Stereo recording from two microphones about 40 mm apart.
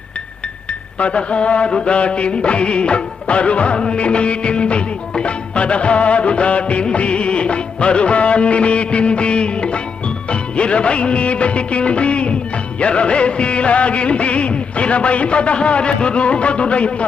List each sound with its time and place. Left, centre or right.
0.9 s mantra: left
1.7 s music: left